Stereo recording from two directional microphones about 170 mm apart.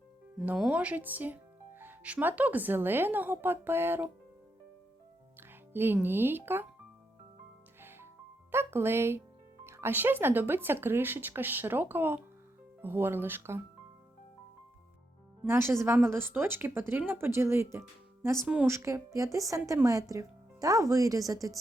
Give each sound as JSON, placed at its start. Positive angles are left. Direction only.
{"t": 0.3, "sound": "speech", "side_deg": -5}
{"t": 5.4, "sound": "speech", "side_deg": -15}
{"t": 7.8, "sound": "music", "side_deg": -15}
{"t": 8.5, "sound": "speech", "side_deg": -15}
{"t": 15.4, "sound": "speech", "side_deg": -15}